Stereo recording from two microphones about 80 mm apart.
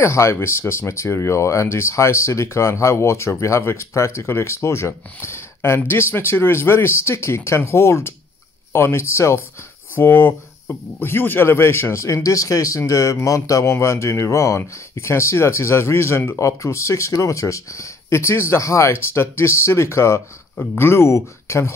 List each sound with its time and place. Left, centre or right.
0.0 s speech: left